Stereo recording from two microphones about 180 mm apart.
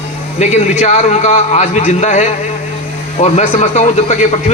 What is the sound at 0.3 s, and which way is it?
A man's voice, 40° left (ahead or behind).